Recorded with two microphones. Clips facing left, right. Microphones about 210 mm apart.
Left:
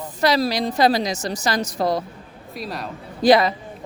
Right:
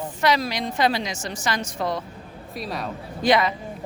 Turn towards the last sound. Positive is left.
turn(degrees=35)  # may be behind; listen again after turning